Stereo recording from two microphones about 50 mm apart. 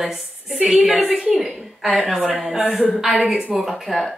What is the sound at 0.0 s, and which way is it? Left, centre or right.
A woman's voice, centre.